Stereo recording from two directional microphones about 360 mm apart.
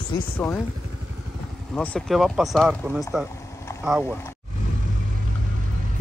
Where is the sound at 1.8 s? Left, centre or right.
Centre.